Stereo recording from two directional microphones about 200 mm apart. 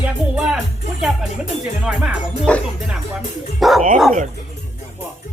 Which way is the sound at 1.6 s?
5° right (ahead or behind).